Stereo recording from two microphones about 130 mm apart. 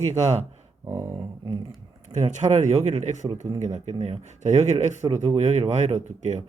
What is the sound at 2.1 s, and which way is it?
Speech, 65° right (ahead or behind).